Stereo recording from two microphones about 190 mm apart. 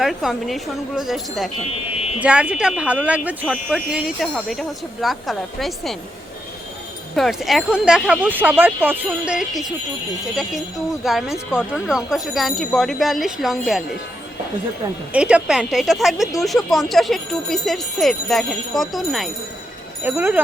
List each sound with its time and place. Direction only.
0.0 s speech: centre (ahead or behind)
2.0 s a sound: 35° left (ahead or behind)
2.2 s speech: 5° right (ahead or behind)
7.2 s speech: centre (ahead or behind)
11.0 s speech: centre (ahead or behind)
15.1 s speech: 5° right (ahead or behind)